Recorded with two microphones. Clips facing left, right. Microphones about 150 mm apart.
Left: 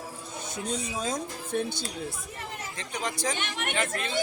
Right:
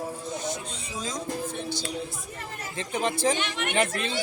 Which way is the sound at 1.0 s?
55° left (ahead or behind).